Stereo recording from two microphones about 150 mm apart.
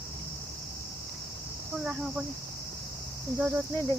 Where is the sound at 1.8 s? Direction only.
Centre (ahead or behind).